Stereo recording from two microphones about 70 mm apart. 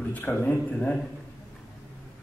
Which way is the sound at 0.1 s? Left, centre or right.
Left.